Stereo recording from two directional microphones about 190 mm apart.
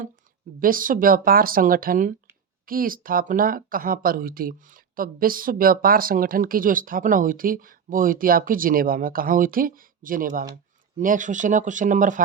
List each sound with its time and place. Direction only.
0.6 s speech: 45° right (ahead or behind)